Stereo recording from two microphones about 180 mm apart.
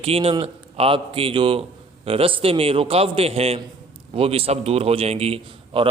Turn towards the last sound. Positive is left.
turn(degrees=-30)  # may be behind; listen again after turning